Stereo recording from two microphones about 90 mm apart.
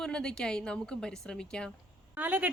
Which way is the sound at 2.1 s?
20° right (ahead or behind).